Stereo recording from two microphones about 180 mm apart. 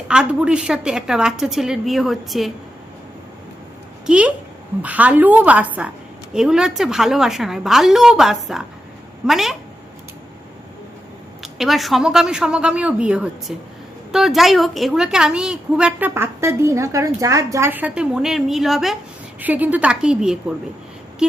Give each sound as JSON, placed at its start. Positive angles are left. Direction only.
{"t": 0.1, "sound": "a woman's voice", "side_deg": -5}
{"t": 4.0, "sound": "a woman's voice", "side_deg": -5}
{"t": 11.5, "sound": "a woman's voice", "side_deg": 0}